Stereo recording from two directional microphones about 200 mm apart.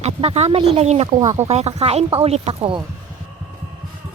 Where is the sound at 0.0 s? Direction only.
30° right (ahead or behind).